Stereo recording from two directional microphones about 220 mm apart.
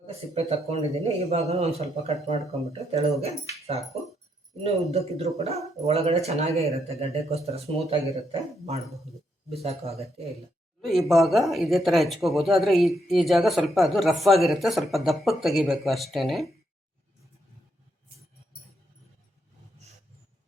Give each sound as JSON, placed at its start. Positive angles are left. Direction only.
{"t": 0.3, "sound": "speech", "side_deg": -30}
{"t": 4.9, "sound": "speech", "side_deg": -30}
{"t": 10.8, "sound": "speech", "side_deg": 0}